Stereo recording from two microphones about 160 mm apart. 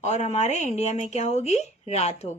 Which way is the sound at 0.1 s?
45° left (ahead or behind).